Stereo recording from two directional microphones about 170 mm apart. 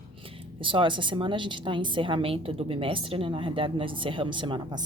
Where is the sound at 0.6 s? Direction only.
30° right (ahead or behind).